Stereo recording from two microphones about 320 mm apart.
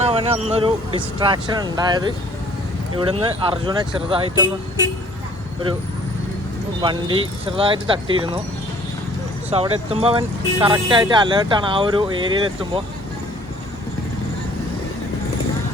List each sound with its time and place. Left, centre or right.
0.0 s speech: centre
6.8 s speech: centre
9.5 s speech: centre